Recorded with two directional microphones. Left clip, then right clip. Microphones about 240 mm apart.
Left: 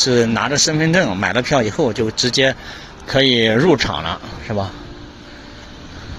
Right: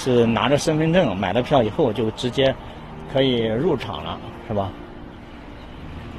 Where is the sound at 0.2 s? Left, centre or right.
Centre.